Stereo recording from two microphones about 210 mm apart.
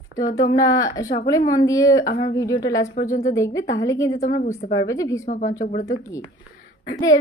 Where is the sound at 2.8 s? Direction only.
40° left (ahead or behind).